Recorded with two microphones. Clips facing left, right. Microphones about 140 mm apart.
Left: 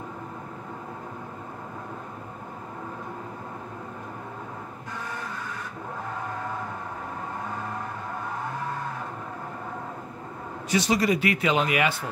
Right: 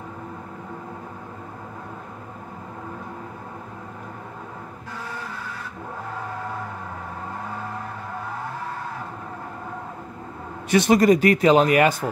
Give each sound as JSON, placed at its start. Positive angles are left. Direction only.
{"t": 10.7, "sound": "speech", "side_deg": -55}